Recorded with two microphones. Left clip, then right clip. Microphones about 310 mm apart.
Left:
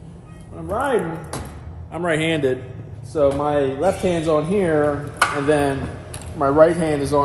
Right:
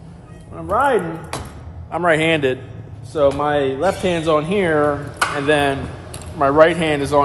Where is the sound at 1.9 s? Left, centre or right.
Right.